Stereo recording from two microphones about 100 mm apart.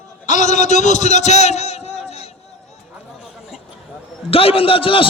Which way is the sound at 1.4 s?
90° left.